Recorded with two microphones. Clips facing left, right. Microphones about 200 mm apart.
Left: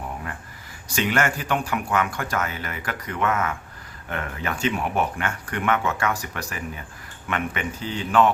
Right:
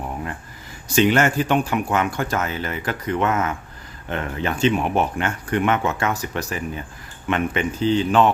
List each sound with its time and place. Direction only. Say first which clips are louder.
0.9 s speech: right 6 dB; 25° right (ahead or behind)